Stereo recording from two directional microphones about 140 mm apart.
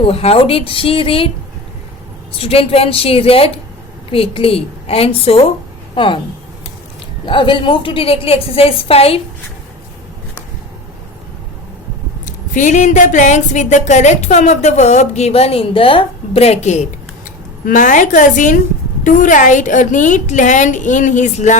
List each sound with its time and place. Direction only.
0.0 s a woman's voice: 45° left (ahead or behind)
2.3 s a woman's voice: 45° left (ahead or behind)
7.3 s a woman's voice: 35° left (ahead or behind)
12.2 s speech: 60° left (ahead or behind)
17.2 s speech: 70° left (ahead or behind)